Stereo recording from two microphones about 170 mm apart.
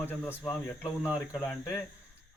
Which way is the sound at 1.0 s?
5° right (ahead or behind).